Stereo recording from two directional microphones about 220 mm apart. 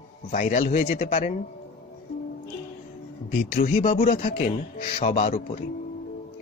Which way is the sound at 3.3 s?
40° left (ahead or behind).